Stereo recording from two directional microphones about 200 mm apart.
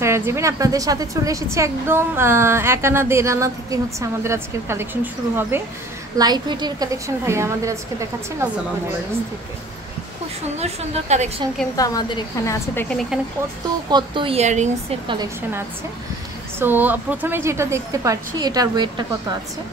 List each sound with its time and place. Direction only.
0.0 s a woman's voice: 15° right (ahead or behind)
10.6 s a woman's voice: 35° right (ahead or behind)
11.7 s a woman's voice: 20° left (ahead or behind)
13.8 s speech: 25° right (ahead or behind)
16.5 s a woman's voice: 10° right (ahead or behind)